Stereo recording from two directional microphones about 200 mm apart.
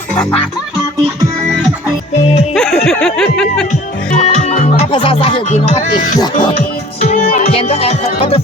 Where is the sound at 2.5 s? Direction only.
5° left (ahead or behind).